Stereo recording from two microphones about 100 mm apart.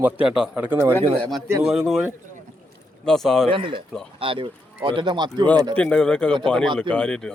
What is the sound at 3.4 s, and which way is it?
Speech, 60° right (ahead or behind).